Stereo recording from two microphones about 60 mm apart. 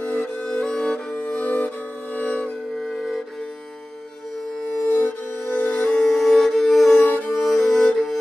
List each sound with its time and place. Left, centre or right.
0.4 s music: centre
1.1 s music: left
2.8 s music: centre
5.0 s music: centre